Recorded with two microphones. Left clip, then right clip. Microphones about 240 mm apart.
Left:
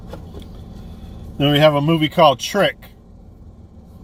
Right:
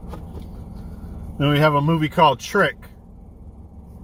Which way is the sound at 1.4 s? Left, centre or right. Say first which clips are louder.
Left 4 dB; centre.